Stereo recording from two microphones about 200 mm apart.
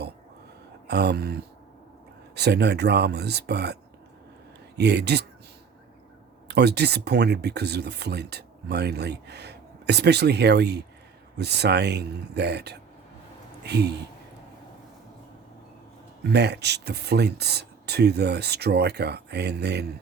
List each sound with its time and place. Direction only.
0.9 s speech: 55° right (ahead or behind)
4.8 s speech: 55° right (ahead or behind)
6.5 s speech: 55° right (ahead or behind)
16.3 s speech: 55° right (ahead or behind)